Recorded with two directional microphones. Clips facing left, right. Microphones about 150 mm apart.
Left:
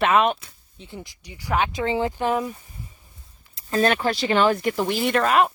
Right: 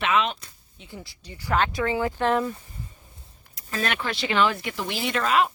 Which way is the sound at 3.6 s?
35° left (ahead or behind).